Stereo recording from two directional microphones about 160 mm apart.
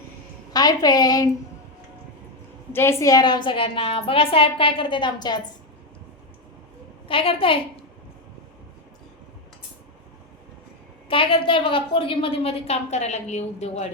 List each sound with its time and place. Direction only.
0.5 s a woman's voice: 25° left (ahead or behind)
2.7 s a woman's voice: 15° left (ahead or behind)
7.1 s a woman's voice: 35° left (ahead or behind)
11.1 s a woman's voice: 35° left (ahead or behind)